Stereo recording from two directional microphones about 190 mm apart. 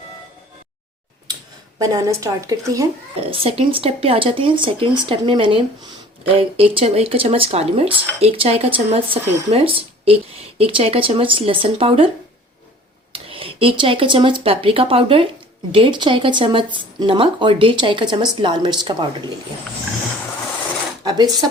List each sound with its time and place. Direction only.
1.8 s a woman's voice: 20° right (ahead or behind)
3.2 s speech: 30° right (ahead or behind)
13.1 s speech: 30° right (ahead or behind)
21.0 s speech: 20° right (ahead or behind)